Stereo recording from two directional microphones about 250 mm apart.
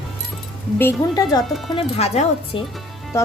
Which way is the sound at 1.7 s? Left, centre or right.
Left.